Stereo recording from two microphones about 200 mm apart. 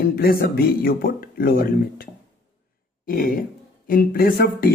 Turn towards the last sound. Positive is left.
turn(degrees=45)  # may be behind; listen again after turning